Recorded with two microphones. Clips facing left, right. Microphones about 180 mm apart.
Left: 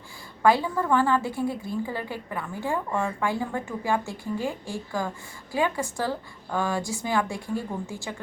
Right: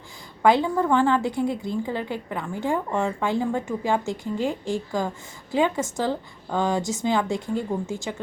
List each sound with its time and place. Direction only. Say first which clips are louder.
0.4 s a woman's voice: right 3 dB; 20° right (ahead or behind)